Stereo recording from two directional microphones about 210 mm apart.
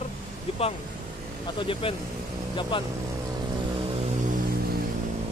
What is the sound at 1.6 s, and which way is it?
Speech, 25° left (ahead or behind).